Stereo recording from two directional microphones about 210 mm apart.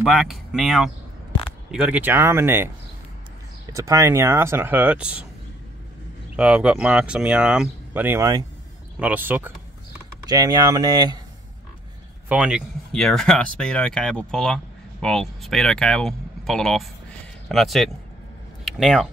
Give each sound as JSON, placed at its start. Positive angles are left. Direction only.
{"t": 0.0, "sound": "speech", "side_deg": 0}
{"t": 3.7, "sound": "speech", "side_deg": -15}
{"t": 6.3, "sound": "speech", "side_deg": -5}
{"t": 12.3, "sound": "speech", "side_deg": -5}